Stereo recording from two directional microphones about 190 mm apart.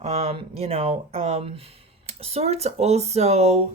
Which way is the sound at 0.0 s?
30° right (ahead or behind).